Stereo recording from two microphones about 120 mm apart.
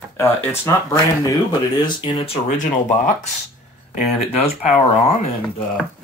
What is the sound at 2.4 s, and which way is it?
Speech, 90° left.